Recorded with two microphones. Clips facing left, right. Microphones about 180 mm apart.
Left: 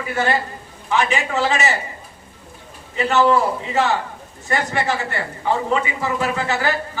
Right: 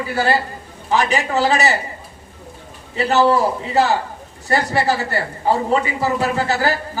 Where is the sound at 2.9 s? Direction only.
35° right (ahead or behind).